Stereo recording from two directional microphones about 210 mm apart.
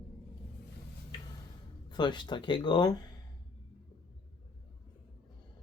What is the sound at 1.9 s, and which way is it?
Speech, 20° left (ahead or behind).